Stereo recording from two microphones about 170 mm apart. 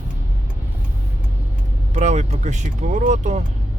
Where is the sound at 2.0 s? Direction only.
45° right (ahead or behind).